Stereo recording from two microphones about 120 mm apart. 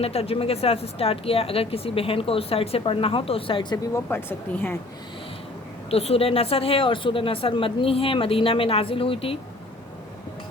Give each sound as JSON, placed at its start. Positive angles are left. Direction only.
{"t": 0.0, "sound": "speech", "side_deg": 60}
{"t": 3.9, "sound": "speech", "side_deg": 20}
{"t": 5.9, "sound": "speech", "side_deg": 55}